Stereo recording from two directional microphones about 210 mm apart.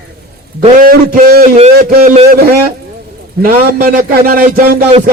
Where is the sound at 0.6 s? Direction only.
40° right (ahead or behind).